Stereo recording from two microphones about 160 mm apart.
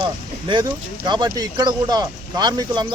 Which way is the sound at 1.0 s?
25° right (ahead or behind).